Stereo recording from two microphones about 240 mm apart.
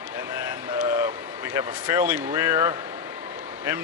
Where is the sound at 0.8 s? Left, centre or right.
Centre.